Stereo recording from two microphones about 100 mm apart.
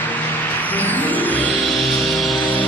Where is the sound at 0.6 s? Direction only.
15° left (ahead or behind).